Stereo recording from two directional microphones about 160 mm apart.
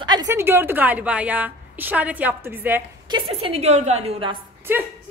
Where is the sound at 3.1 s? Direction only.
40° right (ahead or behind).